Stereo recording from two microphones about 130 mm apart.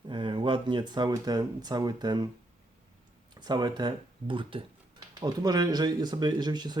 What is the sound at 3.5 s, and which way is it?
Speech, 30° right (ahead or behind).